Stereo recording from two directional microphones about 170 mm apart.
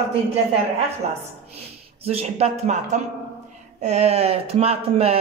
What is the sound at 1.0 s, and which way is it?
Speech, 40° right (ahead or behind).